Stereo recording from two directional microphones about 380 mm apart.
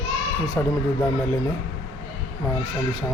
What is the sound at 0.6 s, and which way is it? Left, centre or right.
Speech, centre.